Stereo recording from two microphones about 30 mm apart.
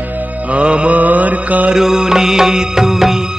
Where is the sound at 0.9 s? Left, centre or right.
Right.